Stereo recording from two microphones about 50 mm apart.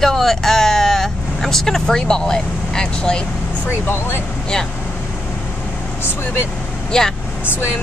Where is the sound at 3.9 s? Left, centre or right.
Left.